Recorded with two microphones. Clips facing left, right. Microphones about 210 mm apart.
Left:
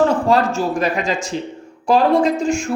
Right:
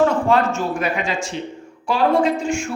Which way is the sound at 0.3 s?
35° left (ahead or behind).